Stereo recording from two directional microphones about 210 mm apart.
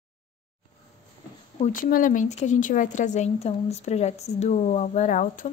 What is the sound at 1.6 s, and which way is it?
Speech, 40° left (ahead or behind).